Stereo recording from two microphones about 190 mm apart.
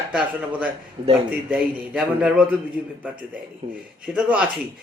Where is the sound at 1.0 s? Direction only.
30° right (ahead or behind).